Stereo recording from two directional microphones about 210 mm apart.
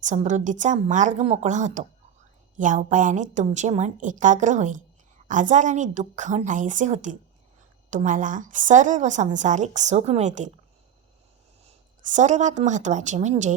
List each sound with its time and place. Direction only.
0.0 s a woman's voice: 35° right (ahead or behind)
11.6 s speech: 35° right (ahead or behind)